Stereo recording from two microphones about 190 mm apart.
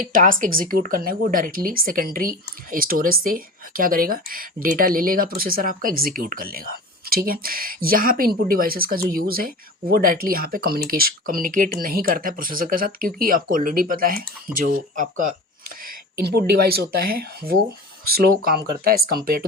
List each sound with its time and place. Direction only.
0.0 s speech: 45° right (ahead or behind)